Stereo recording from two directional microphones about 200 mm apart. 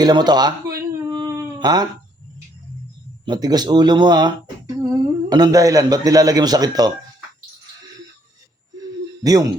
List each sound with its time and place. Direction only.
0.0 s a sound: 20° right (ahead or behind)
3.2 s speech: 20° right (ahead or behind)
9.2 s speech: 20° right (ahead or behind)